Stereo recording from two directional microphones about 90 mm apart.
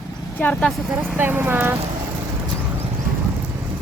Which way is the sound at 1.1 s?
20° right (ahead or behind).